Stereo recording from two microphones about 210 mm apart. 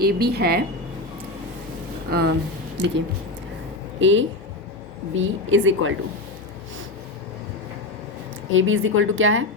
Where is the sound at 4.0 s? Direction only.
65° right (ahead or behind).